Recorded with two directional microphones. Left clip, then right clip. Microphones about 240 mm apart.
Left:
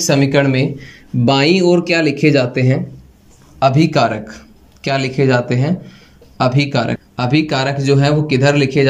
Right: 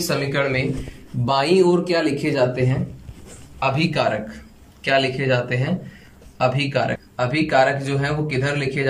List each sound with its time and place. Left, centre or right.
0.0 s speech: left